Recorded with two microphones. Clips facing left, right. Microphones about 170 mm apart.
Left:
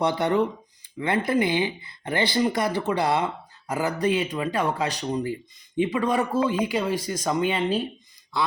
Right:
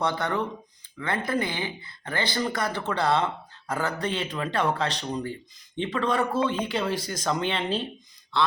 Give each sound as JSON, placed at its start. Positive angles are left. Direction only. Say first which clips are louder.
{"t": 0.0, "sound": "speech", "louder": "left 5 dB", "side_deg": 15}